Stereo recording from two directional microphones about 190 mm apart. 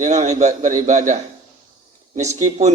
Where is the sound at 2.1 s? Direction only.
35° right (ahead or behind).